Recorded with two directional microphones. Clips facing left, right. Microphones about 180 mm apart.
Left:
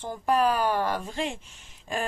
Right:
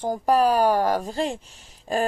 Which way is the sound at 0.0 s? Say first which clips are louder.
Right 4 dB; 40° right (ahead or behind).